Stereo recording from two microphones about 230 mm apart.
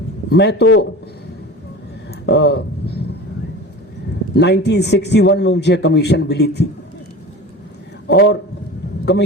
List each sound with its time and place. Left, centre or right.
0.3 s speech: left
2.2 s a sound: left
4.4 s speech: left
8.0 s a man's voice: left